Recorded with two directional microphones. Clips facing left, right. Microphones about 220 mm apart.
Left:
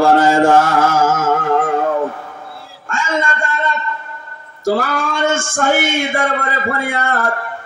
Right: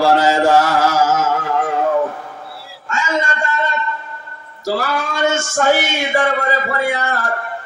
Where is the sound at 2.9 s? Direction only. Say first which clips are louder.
Left 1 dB; 50° left (ahead or behind).